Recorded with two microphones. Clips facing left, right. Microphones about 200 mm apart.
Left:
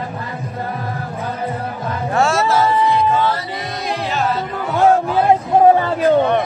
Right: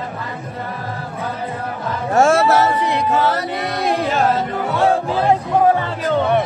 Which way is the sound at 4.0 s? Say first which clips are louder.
Right 1 dB; 45° right (ahead or behind).